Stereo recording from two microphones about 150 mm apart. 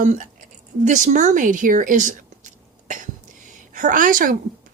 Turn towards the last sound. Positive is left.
turn(degrees=-65)  # may be behind; listen again after turning